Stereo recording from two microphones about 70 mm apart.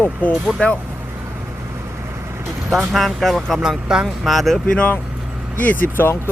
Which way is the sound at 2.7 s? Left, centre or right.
Centre.